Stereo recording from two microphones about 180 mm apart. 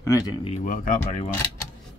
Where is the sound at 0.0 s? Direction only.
15° left (ahead or behind).